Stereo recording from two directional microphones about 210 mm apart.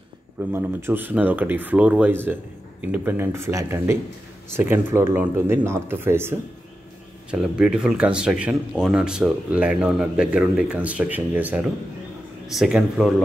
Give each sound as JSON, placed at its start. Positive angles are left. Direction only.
{"t": 0.5, "sound": "speech", "side_deg": -10}